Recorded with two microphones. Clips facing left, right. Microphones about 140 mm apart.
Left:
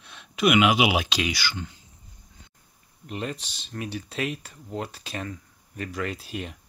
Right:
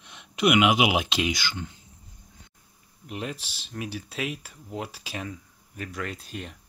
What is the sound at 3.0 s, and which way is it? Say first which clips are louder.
Speech: left 2 dB; 5° right (ahead or behind).